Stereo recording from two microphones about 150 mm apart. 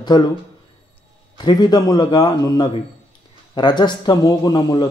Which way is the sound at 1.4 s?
30° left (ahead or behind).